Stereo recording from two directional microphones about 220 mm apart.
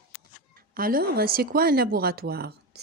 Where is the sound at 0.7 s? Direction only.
40° right (ahead or behind).